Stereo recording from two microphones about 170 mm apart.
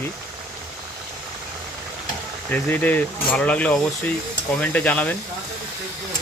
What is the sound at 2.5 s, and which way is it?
Speech, 10° left (ahead or behind).